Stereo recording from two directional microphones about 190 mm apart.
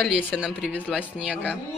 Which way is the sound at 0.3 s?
5° right (ahead or behind).